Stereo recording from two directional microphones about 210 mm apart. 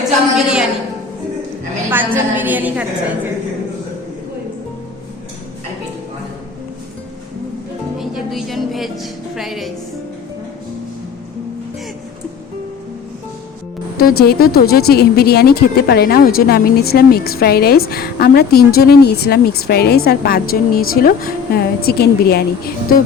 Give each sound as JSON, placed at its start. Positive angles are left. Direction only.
{"t": 1.9, "sound": "a woman's voice", "side_deg": -10}
{"t": 7.9, "sound": "speech", "side_deg": 0}
{"t": 13.9, "sound": "speech", "side_deg": 45}